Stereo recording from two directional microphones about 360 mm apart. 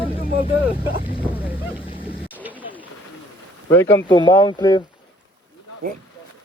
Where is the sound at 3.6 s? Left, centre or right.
Centre.